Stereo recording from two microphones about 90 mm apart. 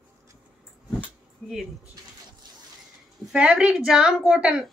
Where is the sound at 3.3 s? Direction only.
10° right (ahead or behind).